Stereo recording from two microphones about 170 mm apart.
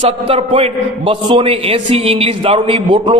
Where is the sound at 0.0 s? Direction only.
35° right (ahead or behind).